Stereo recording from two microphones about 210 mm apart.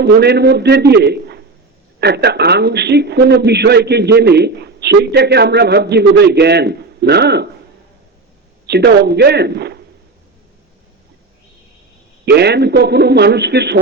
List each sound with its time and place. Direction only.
0.0 s a man's voice: 50° right (ahead or behind)
8.6 s a man's voice: 50° right (ahead or behind)
12.2 s a man's voice: 50° right (ahead or behind)